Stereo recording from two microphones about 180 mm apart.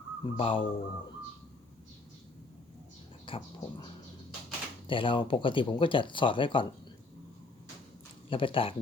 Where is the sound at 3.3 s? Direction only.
30° left (ahead or behind).